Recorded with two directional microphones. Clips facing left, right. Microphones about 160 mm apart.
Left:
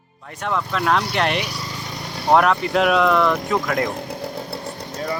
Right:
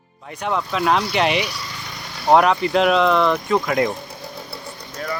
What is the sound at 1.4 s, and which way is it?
Vehicle, 40° left (ahead or behind).